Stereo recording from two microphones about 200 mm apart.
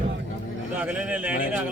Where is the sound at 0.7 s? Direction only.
5° right (ahead or behind).